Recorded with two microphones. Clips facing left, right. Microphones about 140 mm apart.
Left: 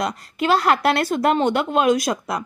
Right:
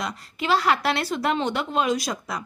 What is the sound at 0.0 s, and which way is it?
A woman's voice, 50° left (ahead or behind).